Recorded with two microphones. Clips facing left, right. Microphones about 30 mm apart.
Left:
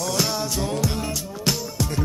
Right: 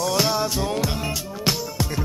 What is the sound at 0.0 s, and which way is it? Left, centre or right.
Music, centre.